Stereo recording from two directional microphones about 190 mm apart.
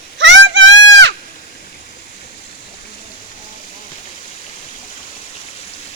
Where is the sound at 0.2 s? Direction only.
75° right (ahead or behind).